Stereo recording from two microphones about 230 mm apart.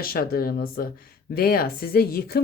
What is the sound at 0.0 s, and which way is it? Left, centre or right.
Speech, left.